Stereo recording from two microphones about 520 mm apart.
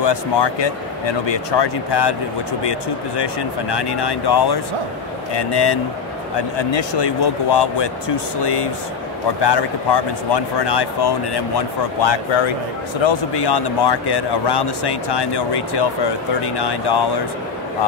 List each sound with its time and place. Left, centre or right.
0.0 s a man's voice: left